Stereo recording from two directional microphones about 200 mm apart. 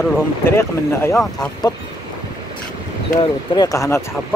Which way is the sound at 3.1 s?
20° left (ahead or behind).